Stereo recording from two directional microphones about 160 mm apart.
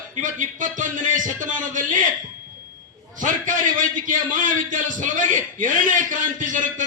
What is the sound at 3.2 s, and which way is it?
A man's voice, 55° right (ahead or behind).